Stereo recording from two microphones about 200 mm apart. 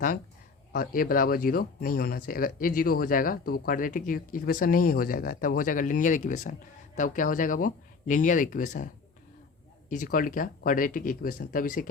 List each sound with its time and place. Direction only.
0.7 s speech: 45° left (ahead or behind)
9.9 s speech: 40° left (ahead or behind)